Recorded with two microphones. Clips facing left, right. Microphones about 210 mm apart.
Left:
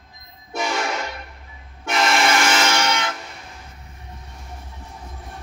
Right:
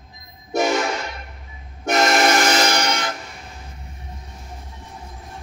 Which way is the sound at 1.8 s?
45° right (ahead or behind).